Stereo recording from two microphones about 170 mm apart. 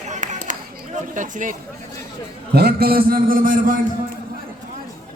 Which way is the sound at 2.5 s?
65° right (ahead or behind).